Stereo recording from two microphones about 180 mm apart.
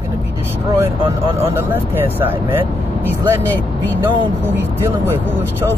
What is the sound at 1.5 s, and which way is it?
Speech, 10° right (ahead or behind).